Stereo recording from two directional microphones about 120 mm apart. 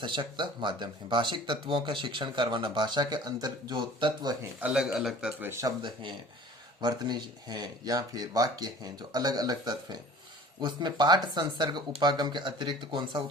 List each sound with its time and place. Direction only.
0.0 s speech: 40° right (ahead or behind)
4.6 s speech: 5° right (ahead or behind)
5.4 s speech: 20° right (ahead or behind)
5.6 s speech: 40° right (ahead or behind)